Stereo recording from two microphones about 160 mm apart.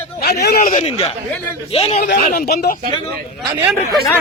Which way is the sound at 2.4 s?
80° left.